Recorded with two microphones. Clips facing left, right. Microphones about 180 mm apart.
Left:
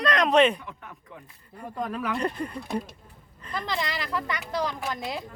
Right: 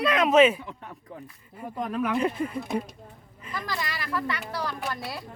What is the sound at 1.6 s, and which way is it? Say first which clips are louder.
Speech: right 2 dB; 5° right (ahead or behind).